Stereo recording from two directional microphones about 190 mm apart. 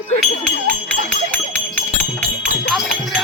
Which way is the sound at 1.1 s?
5° left (ahead or behind).